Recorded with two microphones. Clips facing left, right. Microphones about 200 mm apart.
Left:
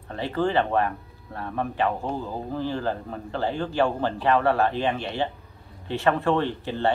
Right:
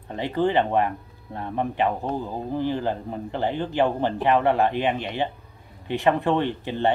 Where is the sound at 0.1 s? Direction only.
15° right (ahead or behind).